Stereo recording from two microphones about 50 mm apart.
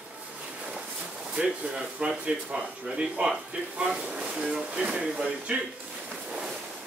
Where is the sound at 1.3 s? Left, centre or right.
Centre.